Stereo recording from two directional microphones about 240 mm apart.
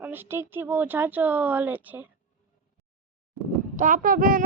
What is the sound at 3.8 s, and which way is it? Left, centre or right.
Speech, right.